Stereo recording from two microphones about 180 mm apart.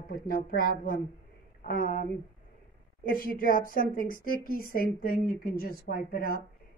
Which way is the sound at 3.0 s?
50° left (ahead or behind).